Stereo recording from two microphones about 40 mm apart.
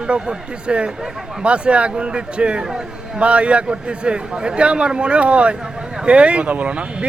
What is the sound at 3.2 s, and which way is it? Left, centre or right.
Speech, right.